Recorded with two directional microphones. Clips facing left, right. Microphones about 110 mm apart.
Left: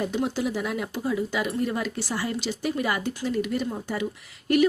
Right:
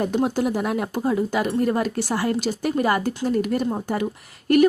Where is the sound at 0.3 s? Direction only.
50° right (ahead or behind).